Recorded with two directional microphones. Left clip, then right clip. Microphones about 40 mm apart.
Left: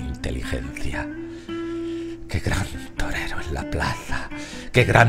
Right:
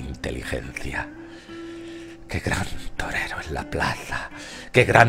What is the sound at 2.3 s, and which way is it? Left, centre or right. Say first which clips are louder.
Speech: right 2 dB; centre.